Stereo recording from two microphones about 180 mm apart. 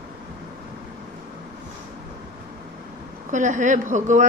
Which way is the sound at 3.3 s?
45° right (ahead or behind).